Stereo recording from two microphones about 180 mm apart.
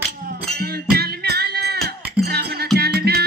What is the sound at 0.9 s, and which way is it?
Music, 60° right (ahead or behind).